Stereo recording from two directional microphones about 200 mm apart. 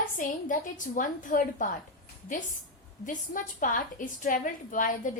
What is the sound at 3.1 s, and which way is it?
A woman's voice, 40° left (ahead or behind).